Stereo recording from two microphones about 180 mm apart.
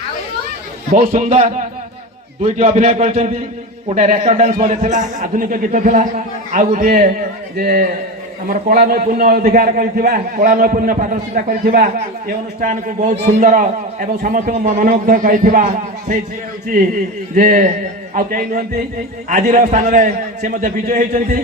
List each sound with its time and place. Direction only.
0.9 s a man's voice: 45° right (ahead or behind)
17.3 s a man's voice: 50° right (ahead or behind)